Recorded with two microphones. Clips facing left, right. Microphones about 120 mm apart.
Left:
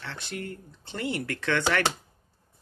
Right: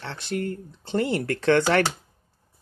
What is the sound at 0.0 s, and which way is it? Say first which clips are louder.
Speech: right 7 dB; 35° right (ahead or behind).